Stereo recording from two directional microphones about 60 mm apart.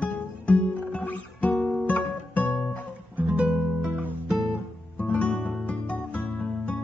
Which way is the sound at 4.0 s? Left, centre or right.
Right.